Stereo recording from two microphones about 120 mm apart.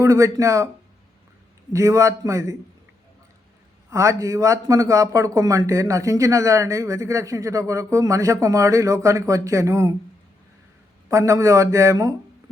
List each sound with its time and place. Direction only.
0.0 s a man's voice: 25° right (ahead or behind)
1.7 s a man's voice: 25° right (ahead or behind)
3.8 s a man's voice: 25° right (ahead or behind)
11.1 s a man's voice: 25° right (ahead or behind)